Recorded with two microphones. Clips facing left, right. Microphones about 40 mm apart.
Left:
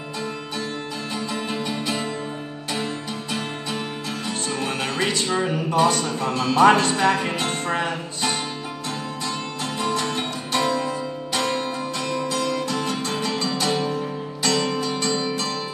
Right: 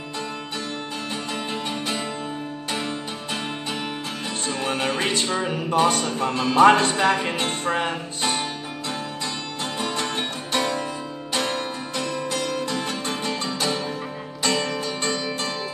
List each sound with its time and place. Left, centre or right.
1.1 s music: right